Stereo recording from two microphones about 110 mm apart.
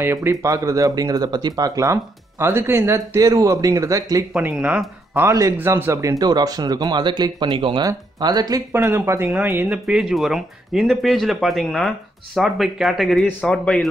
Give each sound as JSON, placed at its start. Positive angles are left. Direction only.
{"t": 0.0, "sound": "speech", "side_deg": -20}
{"t": 4.4, "sound": "speech", "side_deg": -15}
{"t": 8.7, "sound": "speech", "side_deg": -25}